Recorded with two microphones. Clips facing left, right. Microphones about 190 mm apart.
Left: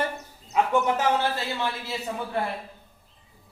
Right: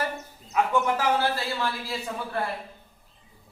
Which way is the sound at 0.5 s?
20° left (ahead or behind).